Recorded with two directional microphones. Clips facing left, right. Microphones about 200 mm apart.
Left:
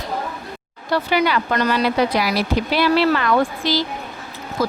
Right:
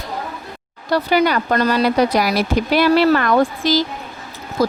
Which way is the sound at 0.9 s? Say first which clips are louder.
Right 3 dB; 40° right (ahead or behind).